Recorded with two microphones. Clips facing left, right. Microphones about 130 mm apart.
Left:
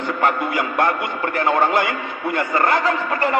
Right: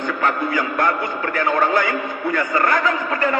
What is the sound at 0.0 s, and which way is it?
A man's voice, 25° left (ahead or behind).